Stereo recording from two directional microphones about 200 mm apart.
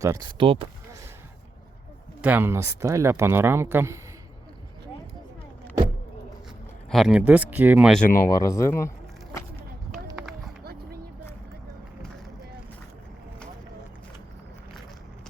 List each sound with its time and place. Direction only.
0.0 s speech: 20° right (ahead or behind)
2.2 s speech: 10° right (ahead or behind)
6.9 s speech: centre (ahead or behind)
8.0 s speech: 45° left (ahead or behind)
8.3 s speech: 15° left (ahead or behind)
10.6 s a sound: 50° right (ahead or behind)